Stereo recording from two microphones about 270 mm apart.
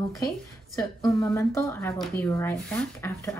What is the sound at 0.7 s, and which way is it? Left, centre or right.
Speech, centre.